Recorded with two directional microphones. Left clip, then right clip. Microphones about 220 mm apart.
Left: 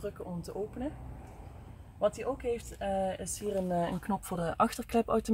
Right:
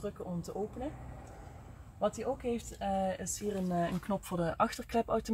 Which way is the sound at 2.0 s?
10° left (ahead or behind).